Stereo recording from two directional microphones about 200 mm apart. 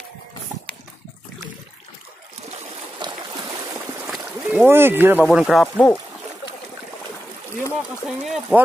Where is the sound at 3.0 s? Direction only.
20° right (ahead or behind).